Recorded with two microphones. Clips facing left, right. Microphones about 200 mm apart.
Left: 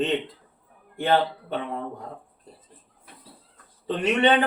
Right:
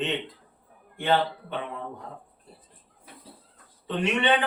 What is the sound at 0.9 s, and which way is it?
Speech, 40° left (ahead or behind).